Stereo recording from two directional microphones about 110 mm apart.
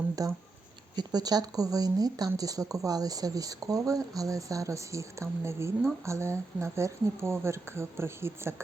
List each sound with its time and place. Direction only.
0.2 s speech: 35° right (ahead or behind)